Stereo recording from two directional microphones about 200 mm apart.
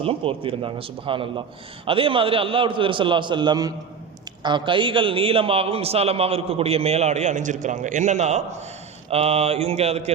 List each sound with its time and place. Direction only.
0.0 s a man's voice: 30° right (ahead or behind)